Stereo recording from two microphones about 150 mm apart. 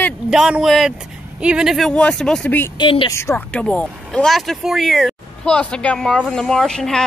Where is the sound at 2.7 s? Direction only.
35° left (ahead or behind).